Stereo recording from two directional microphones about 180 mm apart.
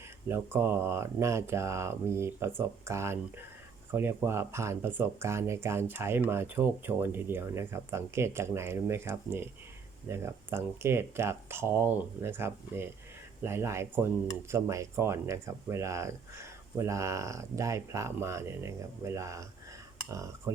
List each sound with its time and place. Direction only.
0.3 s speech: 10° right (ahead or behind)